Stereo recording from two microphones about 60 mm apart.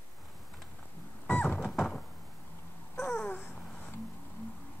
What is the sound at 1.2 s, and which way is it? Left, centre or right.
Music, left.